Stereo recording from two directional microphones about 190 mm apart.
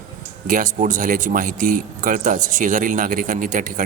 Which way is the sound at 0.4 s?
45° right (ahead or behind).